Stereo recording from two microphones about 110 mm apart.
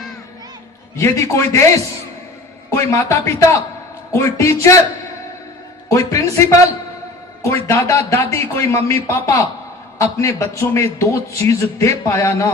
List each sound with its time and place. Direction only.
0.9 s a man's voice: 30° left (ahead or behind)
2.6 s a man's voice: 25° left (ahead or behind)
5.9 s a man's voice: 30° left (ahead or behind)
7.4 s a man's voice: 25° left (ahead or behind)